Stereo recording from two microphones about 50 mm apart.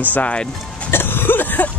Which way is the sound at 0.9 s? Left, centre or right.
Left.